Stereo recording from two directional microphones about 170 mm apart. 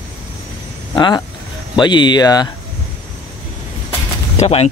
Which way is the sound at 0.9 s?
25° left (ahead or behind).